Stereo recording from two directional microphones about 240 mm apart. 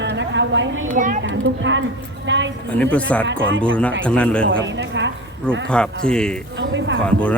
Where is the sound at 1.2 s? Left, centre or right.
Right.